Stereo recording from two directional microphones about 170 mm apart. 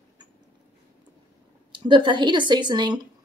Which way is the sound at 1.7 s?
30° right (ahead or behind).